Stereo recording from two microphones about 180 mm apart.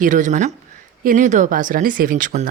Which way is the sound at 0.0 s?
45° right (ahead or behind).